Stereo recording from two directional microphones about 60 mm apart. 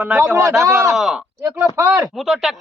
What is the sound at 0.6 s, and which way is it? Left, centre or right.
Speech, right.